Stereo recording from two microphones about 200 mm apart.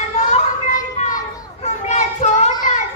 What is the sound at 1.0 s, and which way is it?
Children playing, 35° left (ahead or behind).